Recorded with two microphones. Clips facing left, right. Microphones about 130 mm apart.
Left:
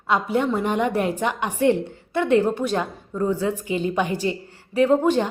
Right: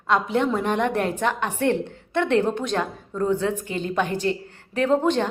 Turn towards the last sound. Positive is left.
turn(degrees=10)  # may be behind; listen again after turning